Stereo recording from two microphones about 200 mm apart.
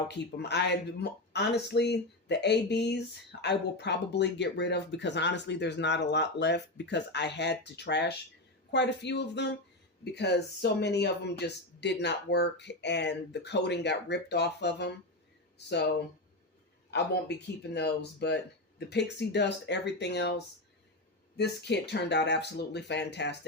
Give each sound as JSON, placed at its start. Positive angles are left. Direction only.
{"t": 0.1, "sound": "speech", "side_deg": 60}
{"t": 21.3, "sound": "speech", "side_deg": 55}